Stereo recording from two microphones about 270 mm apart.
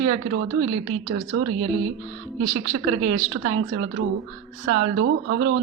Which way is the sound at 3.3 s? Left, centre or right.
Right.